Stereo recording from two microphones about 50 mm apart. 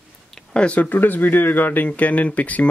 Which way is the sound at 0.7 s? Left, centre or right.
Left.